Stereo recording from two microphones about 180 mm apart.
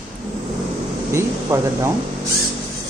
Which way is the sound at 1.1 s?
15° right (ahead or behind).